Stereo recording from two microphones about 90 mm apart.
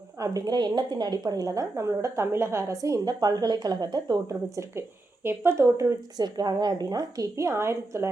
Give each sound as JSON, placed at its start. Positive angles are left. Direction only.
{"t": 0.2, "sound": "a woman's voice", "side_deg": -45}
{"t": 4.3, "sound": "speech", "side_deg": -35}
{"t": 6.1, "sound": "a woman's voice", "side_deg": -50}
{"t": 7.3, "sound": "speech", "side_deg": -35}